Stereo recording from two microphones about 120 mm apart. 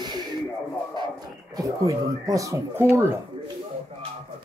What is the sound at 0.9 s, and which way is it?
Speech, 35° right (ahead or behind).